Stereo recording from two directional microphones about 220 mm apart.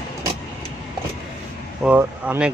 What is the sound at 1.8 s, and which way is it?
Speech, 10° right (ahead or behind).